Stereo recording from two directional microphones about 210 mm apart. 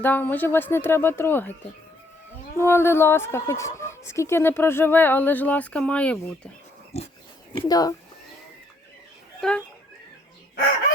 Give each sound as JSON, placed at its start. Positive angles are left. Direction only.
{"t": 0.0, "sound": "a woman's voice", "side_deg": 10}
{"t": 2.6, "sound": "a woman's voice", "side_deg": 10}
{"t": 7.6, "sound": "a woman's voice", "side_deg": 15}
{"t": 9.4, "sound": "speech", "side_deg": 5}